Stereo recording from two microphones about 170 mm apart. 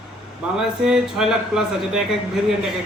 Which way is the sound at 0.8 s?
5° right (ahead or behind).